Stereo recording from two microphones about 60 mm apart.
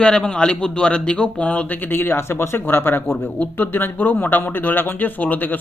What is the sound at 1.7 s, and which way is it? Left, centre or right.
Speech, left.